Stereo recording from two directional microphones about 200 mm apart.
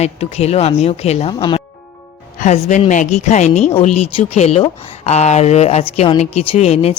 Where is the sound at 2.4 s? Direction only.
35° left (ahead or behind).